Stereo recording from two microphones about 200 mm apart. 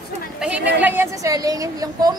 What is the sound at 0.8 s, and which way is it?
A woman's voice, 10° right (ahead or behind).